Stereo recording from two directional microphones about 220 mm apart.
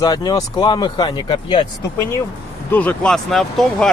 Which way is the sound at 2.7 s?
5° left (ahead or behind).